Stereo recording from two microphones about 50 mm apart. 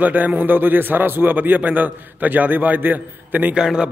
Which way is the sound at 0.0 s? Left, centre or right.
Right.